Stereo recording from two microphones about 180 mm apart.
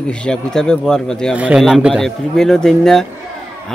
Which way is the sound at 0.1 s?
5° left (ahead or behind).